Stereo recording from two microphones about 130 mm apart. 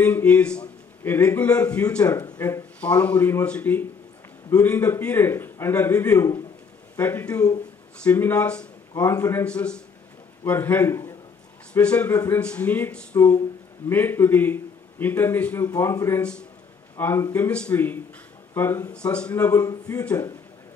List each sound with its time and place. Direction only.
0.0 s a man's voice: 15° left (ahead or behind)
8.9 s a man's voice: 25° left (ahead or behind)
9.4 s a man's voice: 10° left (ahead or behind)
11.7 s a man's voice: 10° left (ahead or behind)
12.1 s a man's voice: 25° left (ahead or behind)
12.4 s a man's voice: 10° left (ahead or behind)
16.2 s a man's voice: 10° left (ahead or behind)
18.9 s a man's voice: 10° left (ahead or behind)
19.5 s a man's voice: 25° left (ahead or behind)